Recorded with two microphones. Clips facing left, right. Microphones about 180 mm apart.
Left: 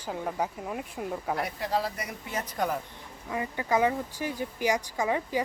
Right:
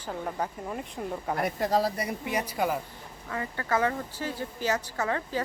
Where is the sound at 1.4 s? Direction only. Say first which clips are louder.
Right 7 dB; 45° right (ahead or behind).